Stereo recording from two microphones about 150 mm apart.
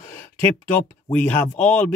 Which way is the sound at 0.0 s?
15° left (ahead or behind).